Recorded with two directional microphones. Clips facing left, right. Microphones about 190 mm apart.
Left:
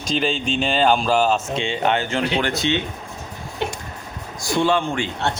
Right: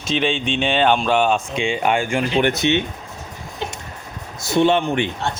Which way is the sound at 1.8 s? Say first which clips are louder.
Right 1 dB; 10° right (ahead or behind).